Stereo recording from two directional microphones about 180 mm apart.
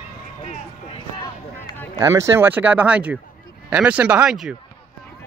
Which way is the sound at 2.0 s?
15° right (ahead or behind).